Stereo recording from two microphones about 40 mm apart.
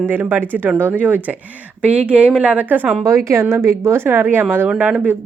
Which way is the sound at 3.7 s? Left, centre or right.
Right.